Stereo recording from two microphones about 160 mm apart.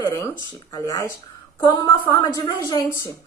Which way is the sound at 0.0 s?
20° left (ahead or behind).